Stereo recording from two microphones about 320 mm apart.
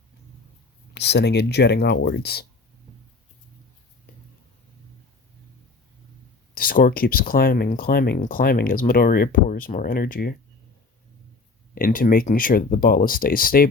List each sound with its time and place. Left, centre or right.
0.9 s speech: left
6.5 s speech: left
11.7 s speech: left